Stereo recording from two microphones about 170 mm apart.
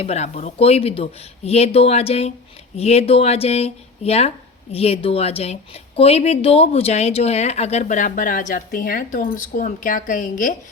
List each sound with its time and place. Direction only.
0.0 s a woman's voice: 40° left (ahead or behind)